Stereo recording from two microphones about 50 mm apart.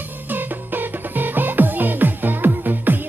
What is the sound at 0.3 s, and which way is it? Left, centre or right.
Music, right.